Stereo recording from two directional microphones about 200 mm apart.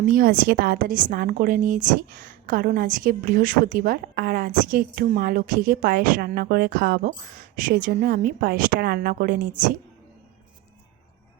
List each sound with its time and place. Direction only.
0.0 s a woman's voice: 45° right (ahead or behind)